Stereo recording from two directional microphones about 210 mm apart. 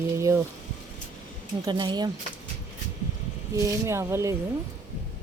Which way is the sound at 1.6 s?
20° right (ahead or behind).